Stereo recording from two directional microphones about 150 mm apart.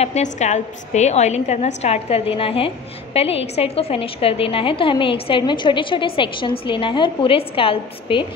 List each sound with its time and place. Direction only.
0.0 s a woman's voice: 50° left (ahead or behind)